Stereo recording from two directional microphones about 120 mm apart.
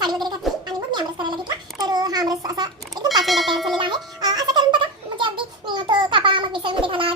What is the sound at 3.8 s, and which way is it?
Music, 35° right (ahead or behind).